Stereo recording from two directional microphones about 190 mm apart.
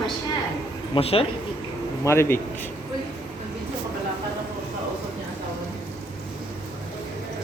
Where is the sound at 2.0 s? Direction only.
15° left (ahead or behind).